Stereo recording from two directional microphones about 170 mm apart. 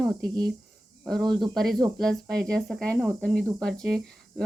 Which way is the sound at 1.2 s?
25° right (ahead or behind).